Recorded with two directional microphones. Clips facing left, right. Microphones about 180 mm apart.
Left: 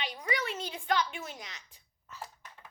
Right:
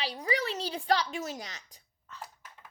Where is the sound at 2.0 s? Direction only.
5° left (ahead or behind).